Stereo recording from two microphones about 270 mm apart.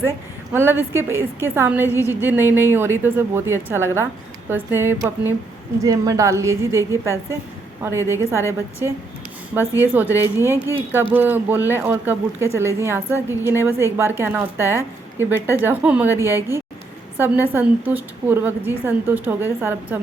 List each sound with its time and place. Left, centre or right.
0.5 s a woman's voice: centre
10.2 s a woman's voice: centre